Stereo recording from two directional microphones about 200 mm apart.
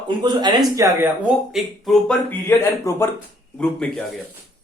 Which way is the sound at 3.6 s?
Centre (ahead or behind).